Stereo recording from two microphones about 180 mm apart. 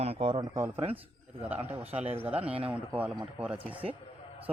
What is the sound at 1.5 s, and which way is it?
A man's voice, 10° right (ahead or behind).